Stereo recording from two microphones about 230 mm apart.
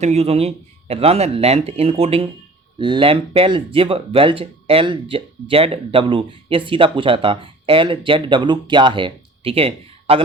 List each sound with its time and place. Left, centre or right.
0.0 s speech: right